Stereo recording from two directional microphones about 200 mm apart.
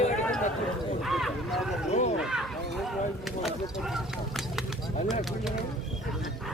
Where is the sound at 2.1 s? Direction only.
Centre (ahead or behind).